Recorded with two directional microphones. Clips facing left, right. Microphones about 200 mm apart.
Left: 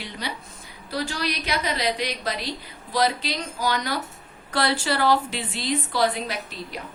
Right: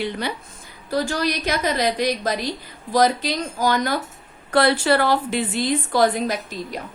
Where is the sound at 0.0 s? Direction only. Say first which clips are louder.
Right 8 dB; 55° right (ahead or behind).